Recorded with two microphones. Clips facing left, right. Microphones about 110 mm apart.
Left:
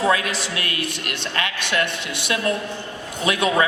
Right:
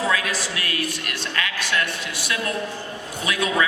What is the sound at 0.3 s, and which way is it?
Speech, 20° left (ahead or behind).